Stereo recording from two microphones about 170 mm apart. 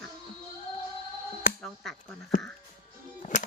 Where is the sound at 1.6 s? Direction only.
5° left (ahead or behind).